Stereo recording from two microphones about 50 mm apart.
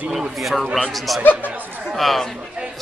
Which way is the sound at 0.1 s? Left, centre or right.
Centre.